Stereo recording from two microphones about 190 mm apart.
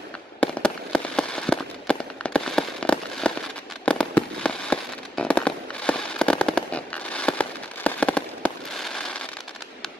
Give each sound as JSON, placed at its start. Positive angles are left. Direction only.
{"t": 0.4, "sound": "fireworks", "side_deg": 5}